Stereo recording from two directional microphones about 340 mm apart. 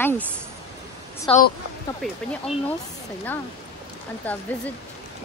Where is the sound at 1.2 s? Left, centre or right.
Left.